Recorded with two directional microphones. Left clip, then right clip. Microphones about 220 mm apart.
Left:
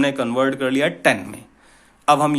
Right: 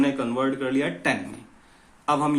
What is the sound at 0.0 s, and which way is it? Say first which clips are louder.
Speech: left 5 dB; 45° left (ahead or behind).